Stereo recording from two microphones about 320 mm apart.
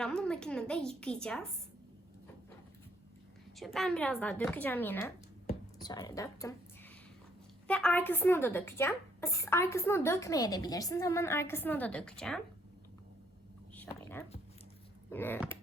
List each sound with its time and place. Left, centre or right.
0.0 s a woman's voice: centre
3.6 s a woman's voice: centre
7.7 s speech: centre
13.7 s a sound: centre
15.1 s a woman's voice: centre